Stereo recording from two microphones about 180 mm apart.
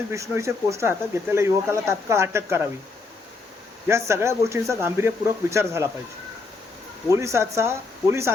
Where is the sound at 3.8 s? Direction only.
15° right (ahead or behind).